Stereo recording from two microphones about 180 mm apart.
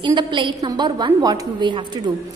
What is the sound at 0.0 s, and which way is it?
A woman's voice, 25° right (ahead or behind).